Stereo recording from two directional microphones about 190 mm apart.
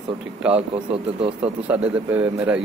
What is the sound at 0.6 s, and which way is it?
Speech, 30° right (ahead or behind).